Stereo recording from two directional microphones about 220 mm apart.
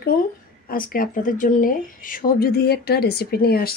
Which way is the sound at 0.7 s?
40° left (ahead or behind).